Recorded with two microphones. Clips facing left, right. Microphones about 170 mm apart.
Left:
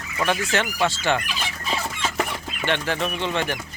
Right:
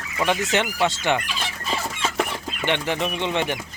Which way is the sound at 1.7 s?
Centre (ahead or behind).